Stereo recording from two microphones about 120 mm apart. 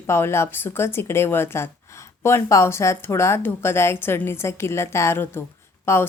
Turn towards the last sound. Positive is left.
turn(degrees=20)  # may be behind; listen again after turning